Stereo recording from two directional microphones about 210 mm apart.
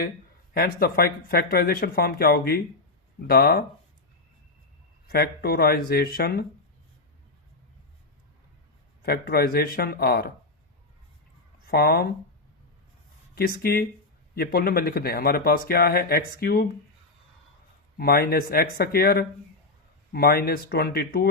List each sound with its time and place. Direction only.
0.5 s a man's voice: 45° left (ahead or behind)
5.0 s a man's voice: 50° left (ahead or behind)
9.0 s a man's voice: 45° left (ahead or behind)
11.7 s a man's voice: 45° left (ahead or behind)
13.3 s a man's voice: 45° left (ahead or behind)
17.9 s a man's voice: 45° left (ahead or behind)